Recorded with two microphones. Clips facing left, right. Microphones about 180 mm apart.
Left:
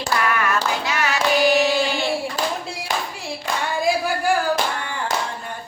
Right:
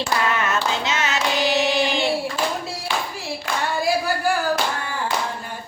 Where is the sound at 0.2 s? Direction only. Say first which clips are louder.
Left 1 dB; 25° right (ahead or behind).